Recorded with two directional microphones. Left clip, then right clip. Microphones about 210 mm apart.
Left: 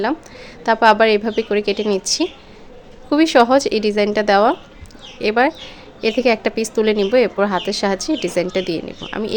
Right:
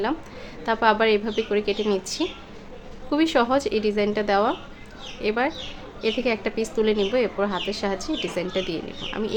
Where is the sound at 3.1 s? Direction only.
30° left (ahead or behind).